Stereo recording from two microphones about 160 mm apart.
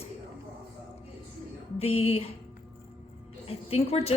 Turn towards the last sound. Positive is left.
turn(degrees=40)  # may be behind; listen again after turning